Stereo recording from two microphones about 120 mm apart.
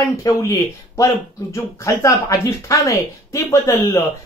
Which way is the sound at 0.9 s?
25° left (ahead or behind).